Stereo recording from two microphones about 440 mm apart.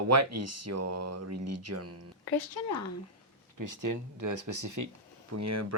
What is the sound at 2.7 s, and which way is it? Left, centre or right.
Speech, left.